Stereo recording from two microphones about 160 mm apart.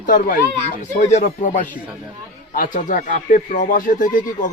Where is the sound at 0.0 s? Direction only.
55° left (ahead or behind).